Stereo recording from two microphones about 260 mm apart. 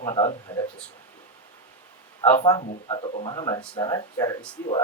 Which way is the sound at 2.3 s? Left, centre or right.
Centre.